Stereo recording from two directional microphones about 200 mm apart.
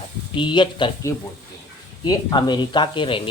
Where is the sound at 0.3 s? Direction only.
25° left (ahead or behind).